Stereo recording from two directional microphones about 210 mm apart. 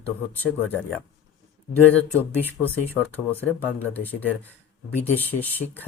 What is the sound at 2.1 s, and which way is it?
Speech, 10° left (ahead or behind).